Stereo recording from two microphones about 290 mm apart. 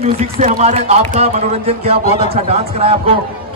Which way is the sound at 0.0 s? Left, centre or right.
Right.